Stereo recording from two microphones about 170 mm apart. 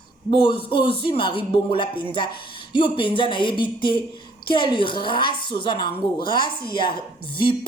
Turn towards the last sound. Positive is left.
turn(degrees=30)  # may be behind; listen again after turning